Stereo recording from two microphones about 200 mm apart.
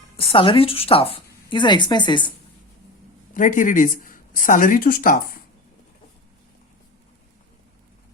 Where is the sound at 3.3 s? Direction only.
40° left (ahead or behind).